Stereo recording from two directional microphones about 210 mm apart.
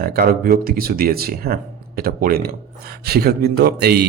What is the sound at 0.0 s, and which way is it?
Speech, 45° right (ahead or behind).